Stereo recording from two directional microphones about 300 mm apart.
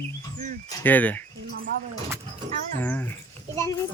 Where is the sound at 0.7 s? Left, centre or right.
Centre.